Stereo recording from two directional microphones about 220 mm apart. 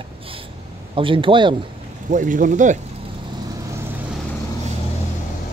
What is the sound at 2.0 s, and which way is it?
Speech, 35° right (ahead or behind).